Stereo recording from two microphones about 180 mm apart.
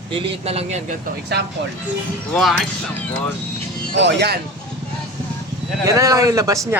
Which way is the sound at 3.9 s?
75° right (ahead or behind).